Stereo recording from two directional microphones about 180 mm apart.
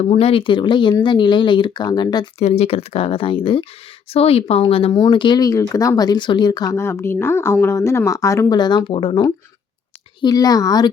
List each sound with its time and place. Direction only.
0.0 s speech: 35° left (ahead or behind)
2.4 s speech: 35° left (ahead or behind)